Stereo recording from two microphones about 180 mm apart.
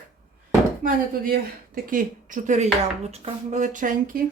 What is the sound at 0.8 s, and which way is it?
Speech, 55° right (ahead or behind).